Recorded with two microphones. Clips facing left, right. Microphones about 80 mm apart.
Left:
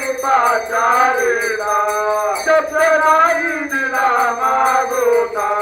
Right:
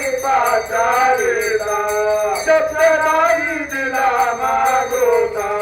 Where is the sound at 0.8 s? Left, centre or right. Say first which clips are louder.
Left 3 dB; left.